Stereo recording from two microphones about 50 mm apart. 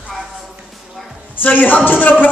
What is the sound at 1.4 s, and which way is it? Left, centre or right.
Speech, left.